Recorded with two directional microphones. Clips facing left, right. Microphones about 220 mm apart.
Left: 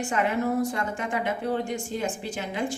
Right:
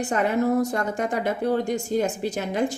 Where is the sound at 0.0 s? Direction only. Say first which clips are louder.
Right 3 dB; 40° right (ahead or behind).